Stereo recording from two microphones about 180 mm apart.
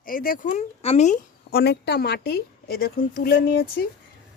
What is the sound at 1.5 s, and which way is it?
Speech, 65° left (ahead or behind).